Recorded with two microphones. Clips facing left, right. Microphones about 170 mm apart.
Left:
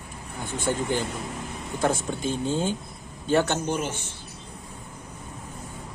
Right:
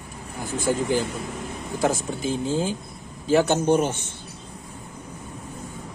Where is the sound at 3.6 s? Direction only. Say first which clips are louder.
Right 8 dB; 55° right (ahead or behind).